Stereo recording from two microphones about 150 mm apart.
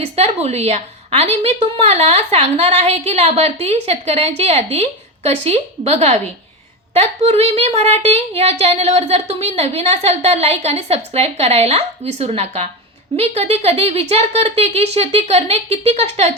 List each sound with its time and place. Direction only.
0.0 s a woman's voice: 45° right (ahead or behind)